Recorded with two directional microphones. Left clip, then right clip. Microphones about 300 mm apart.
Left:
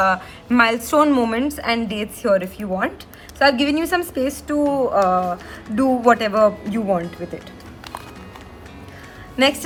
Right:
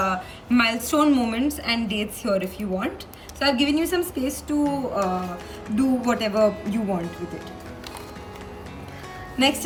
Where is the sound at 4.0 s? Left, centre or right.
Centre.